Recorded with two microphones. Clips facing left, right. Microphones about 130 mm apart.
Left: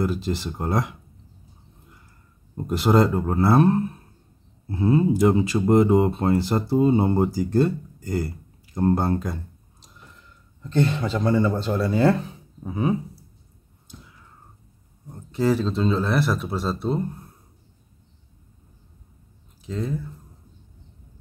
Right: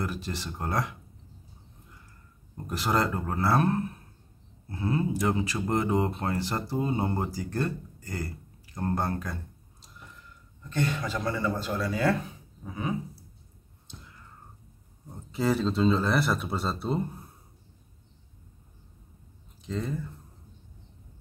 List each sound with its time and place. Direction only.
0.0 s speech: 20° left (ahead or behind)
2.5 s speech: 25° left (ahead or behind)
10.6 s speech: 25° left (ahead or behind)
13.8 s a sound: 5° left (ahead or behind)
15.0 s speech: centre (ahead or behind)
19.6 s speech: centre (ahead or behind)